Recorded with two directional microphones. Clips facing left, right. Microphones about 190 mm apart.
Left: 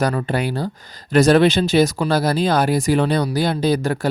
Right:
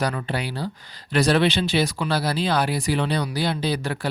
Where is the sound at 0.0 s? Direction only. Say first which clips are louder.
Left 6 dB; 45° left (ahead or behind).